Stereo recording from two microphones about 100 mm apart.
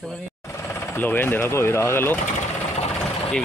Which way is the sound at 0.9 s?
20° left (ahead or behind).